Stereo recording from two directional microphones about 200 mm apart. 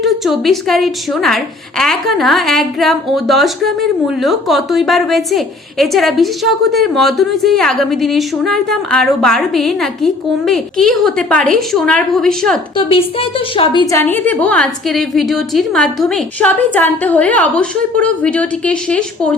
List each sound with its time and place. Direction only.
0.0 s a woman's voice: centre (ahead or behind)
12.7 s a woman's voice: 25° left (ahead or behind)
13.9 s a woman's voice: 10° left (ahead or behind)